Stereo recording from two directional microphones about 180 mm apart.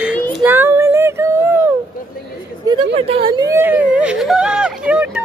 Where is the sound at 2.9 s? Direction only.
30° right (ahead or behind).